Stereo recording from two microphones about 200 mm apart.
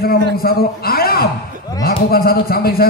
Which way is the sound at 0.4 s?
50° left (ahead or behind).